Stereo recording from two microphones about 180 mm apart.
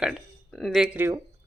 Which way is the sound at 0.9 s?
10° right (ahead or behind).